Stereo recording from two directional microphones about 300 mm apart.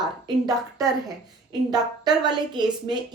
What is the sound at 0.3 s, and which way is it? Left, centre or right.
A woman's voice, centre.